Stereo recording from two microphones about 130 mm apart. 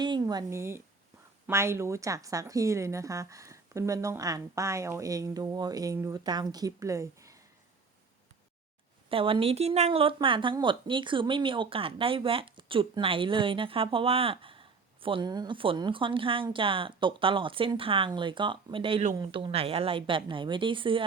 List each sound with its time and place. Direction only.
0.0 s a sound: 35° right (ahead or behind)
0.5 s a woman's voice: 20° right (ahead or behind)
9.0 s speech: 45° right (ahead or behind)